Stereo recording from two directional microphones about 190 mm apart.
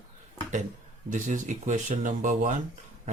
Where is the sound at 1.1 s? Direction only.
40° right (ahead or behind).